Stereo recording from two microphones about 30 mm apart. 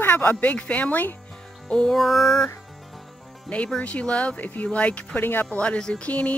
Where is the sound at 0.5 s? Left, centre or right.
Left.